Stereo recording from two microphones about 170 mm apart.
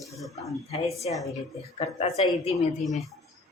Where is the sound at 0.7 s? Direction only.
40° left (ahead or behind).